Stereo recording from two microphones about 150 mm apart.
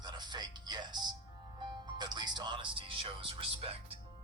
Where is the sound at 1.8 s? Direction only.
30° right (ahead or behind).